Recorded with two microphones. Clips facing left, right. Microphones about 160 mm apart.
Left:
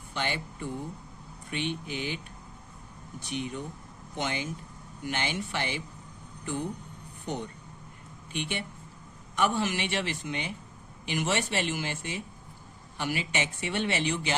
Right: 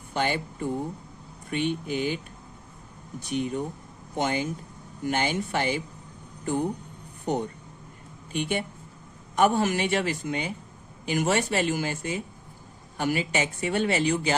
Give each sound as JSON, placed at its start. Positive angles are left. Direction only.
{"t": 0.1, "sound": "a man's voice", "side_deg": -45}
{"t": 3.2, "sound": "a man's voice", "side_deg": -45}